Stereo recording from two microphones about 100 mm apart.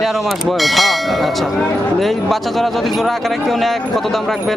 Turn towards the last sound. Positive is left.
turn(degrees=0)  # may be behind; listen again after turning